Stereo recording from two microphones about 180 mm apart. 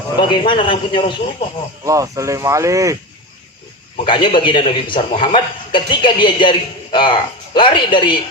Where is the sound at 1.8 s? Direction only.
20° right (ahead or behind).